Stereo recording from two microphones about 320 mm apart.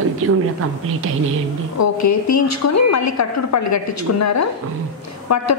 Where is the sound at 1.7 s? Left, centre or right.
Left.